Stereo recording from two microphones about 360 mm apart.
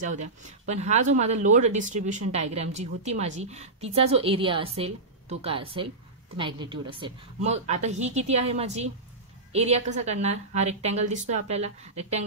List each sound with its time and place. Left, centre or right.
0.0 s a woman's voice: centre